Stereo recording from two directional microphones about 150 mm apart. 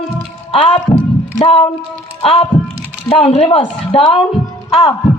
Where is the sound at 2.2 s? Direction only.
40° left (ahead or behind).